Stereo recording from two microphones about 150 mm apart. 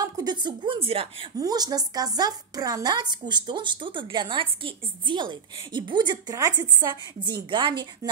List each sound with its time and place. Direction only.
0.0 s speech: 30° right (ahead or behind)
1.4 s speech: 25° right (ahead or behind)